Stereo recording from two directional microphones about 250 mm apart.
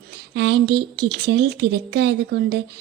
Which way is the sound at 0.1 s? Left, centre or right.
Right.